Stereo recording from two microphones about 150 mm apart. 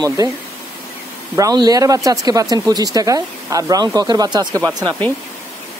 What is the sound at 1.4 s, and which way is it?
Speech, 25° right (ahead or behind).